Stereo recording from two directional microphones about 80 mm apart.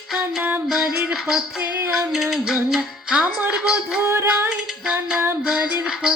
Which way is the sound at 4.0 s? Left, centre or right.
Right.